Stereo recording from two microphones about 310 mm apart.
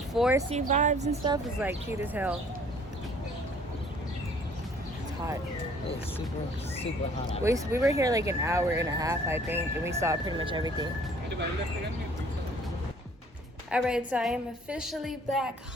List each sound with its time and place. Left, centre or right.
0.1 s speech: centre
0.5 s a woman's voice: right
1.5 s a woman's voice: centre
7.4 s speech: centre
13.7 s a woman's voice: centre